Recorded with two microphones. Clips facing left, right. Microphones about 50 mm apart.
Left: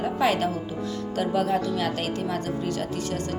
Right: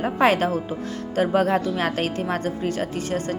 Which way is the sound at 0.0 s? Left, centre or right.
Right.